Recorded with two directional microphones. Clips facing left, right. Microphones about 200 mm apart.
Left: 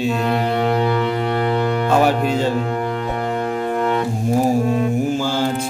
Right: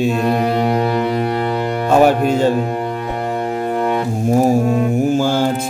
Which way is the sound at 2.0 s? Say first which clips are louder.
Right 4 dB; 50° right (ahead or behind).